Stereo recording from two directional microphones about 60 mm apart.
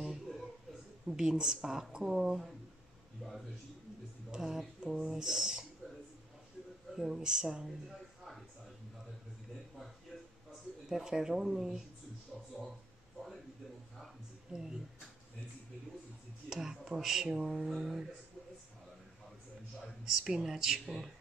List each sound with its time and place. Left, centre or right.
0.0 s a sound: centre
1.0 s speech: centre
3.2 s a sound: centre
4.3 s a sound: centre
5.0 s speech: centre
7.0 s speech: centre
10.9 s speech: centre
14.5 s speech: centre
16.4 s speech: centre
20.1 s speech: centre